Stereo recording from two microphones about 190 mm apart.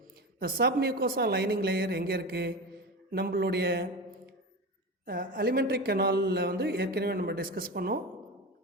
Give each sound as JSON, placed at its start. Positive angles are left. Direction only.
{"t": 0.3, "sound": "speech", "side_deg": -50}
{"t": 5.0, "sound": "speech", "side_deg": -50}